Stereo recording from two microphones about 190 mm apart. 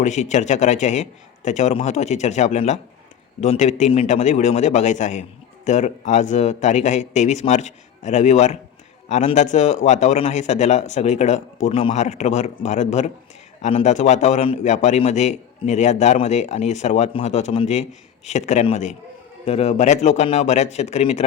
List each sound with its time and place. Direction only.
0.0 s a man's voice: 40° left (ahead or behind)